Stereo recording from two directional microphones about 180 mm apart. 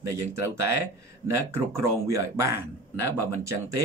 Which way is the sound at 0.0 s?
15° right (ahead or behind).